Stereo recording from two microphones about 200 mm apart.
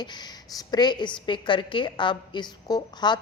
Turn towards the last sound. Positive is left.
turn(degrees=20)  # may be behind; listen again after turning